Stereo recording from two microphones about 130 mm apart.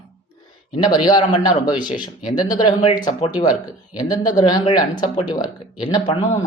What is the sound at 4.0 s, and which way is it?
Speech, 30° left (ahead or behind).